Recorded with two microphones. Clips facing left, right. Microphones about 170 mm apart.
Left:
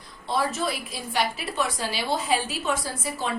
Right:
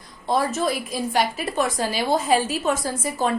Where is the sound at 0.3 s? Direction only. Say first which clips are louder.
Right 4 dB; 45° right (ahead or behind).